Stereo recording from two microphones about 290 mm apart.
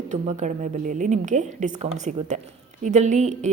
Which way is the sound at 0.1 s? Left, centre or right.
Right.